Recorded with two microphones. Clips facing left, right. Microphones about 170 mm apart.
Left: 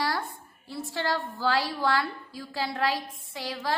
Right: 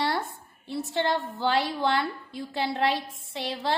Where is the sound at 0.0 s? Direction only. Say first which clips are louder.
Right 2 dB; 25° right (ahead or behind).